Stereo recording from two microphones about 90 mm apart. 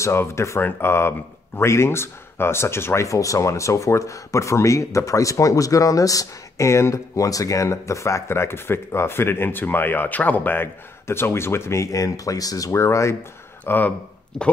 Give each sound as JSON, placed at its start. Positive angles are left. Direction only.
{"t": 0.0, "sound": "speech", "side_deg": 30}
{"t": 13.7, "sound": "speech", "side_deg": 20}